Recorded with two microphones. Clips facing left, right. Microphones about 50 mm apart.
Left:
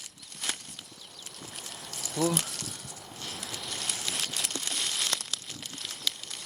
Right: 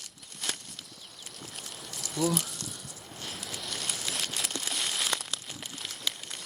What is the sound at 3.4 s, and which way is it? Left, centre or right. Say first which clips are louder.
Crumpling: even; centre.